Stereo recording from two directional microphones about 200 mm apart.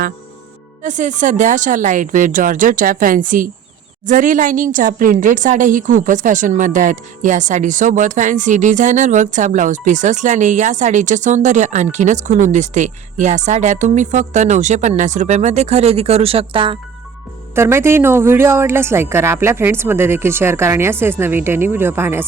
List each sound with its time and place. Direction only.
0.8 s a woman's voice: 40° right (ahead or behind)
17.5 s a woman's voice: 15° right (ahead or behind)